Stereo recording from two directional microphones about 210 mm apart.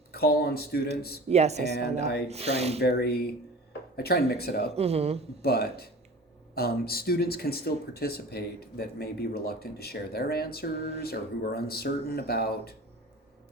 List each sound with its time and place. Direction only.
0.1 s speech: 45° left (ahead or behind)
1.3 s speech: 30° right (ahead or behind)
2.8 s speech: 50° left (ahead or behind)
4.7 s speech: 30° right (ahead or behind)
5.4 s speech: 45° left (ahead or behind)